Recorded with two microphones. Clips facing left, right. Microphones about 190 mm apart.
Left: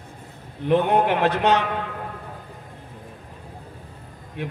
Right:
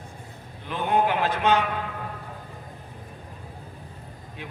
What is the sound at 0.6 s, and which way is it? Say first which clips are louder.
Speech: left 5 dB; 65° left (ahead or behind).